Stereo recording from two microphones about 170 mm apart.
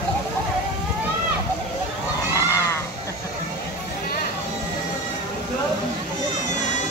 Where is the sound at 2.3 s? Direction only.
20° left (ahead or behind).